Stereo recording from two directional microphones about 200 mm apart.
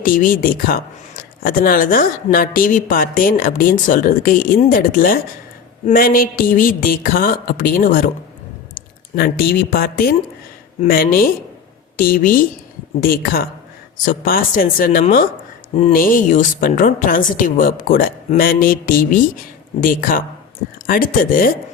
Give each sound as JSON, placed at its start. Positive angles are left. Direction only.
{"t": 0.0, "sound": "speech", "side_deg": 45}